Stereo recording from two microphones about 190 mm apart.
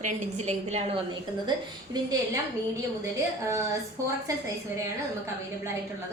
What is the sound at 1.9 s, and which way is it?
Speech, 20° right (ahead or behind).